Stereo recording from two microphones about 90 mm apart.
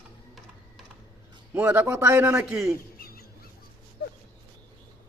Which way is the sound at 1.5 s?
20° right (ahead or behind).